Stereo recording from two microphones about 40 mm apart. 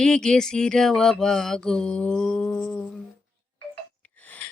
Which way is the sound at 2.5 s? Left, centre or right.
Left.